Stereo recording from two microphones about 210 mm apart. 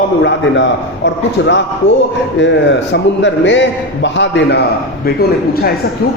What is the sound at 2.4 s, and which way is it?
A man's voice, 60° left (ahead or behind).